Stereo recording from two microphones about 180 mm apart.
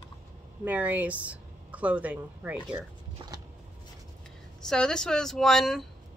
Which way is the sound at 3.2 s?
30° right (ahead or behind).